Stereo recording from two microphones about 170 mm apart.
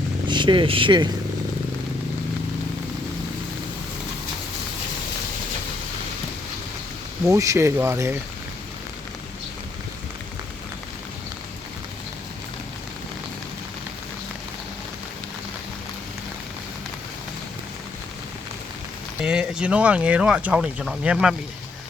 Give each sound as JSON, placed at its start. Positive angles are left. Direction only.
{"t": 0.3, "sound": "speech", "side_deg": -30}
{"t": 7.3, "sound": "speech", "side_deg": -15}
{"t": 19.2, "sound": "speech", "side_deg": -5}